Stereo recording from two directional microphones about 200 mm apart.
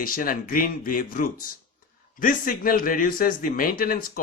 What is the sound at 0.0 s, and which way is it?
Speech, 45° left (ahead or behind).